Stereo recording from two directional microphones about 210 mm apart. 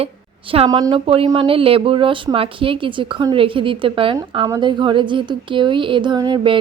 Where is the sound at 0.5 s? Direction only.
25° right (ahead or behind).